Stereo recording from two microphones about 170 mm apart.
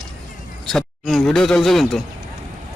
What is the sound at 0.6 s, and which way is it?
Speech, centre (ahead or behind).